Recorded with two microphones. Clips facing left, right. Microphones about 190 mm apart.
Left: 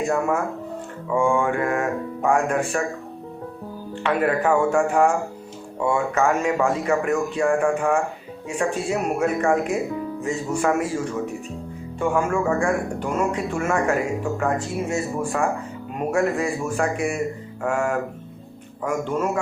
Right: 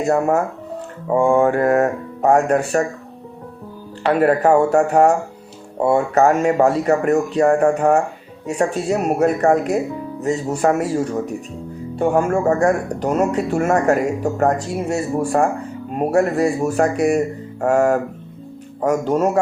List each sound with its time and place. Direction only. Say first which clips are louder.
0.0 s speech: right 5 dB; 40° right (ahead or behind)
4.0 s speech: right 6 dB; 40° right (ahead or behind)